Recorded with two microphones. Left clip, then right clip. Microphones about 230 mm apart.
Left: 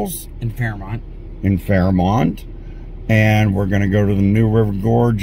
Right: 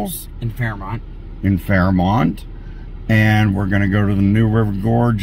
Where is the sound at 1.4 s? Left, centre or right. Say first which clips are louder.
Even; right.